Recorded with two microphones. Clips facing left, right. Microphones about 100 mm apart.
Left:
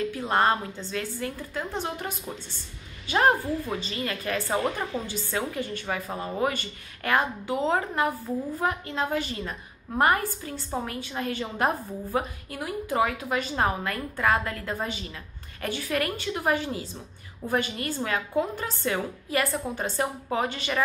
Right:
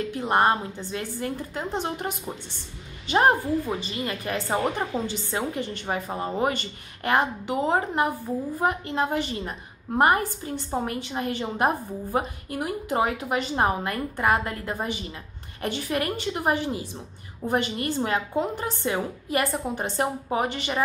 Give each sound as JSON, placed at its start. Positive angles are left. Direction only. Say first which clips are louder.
{"t": 0.1, "sound": "a woman's voice", "louder": "right 4 dB", "side_deg": -20}